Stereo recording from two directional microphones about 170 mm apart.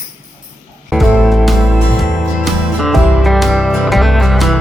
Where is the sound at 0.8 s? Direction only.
Centre (ahead or behind).